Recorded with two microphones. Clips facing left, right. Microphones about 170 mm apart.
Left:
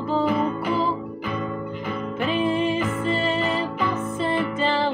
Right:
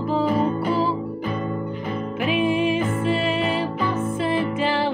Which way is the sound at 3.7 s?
30° right (ahead or behind).